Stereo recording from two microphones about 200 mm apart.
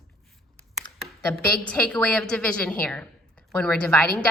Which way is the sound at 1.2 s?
10° left (ahead or behind).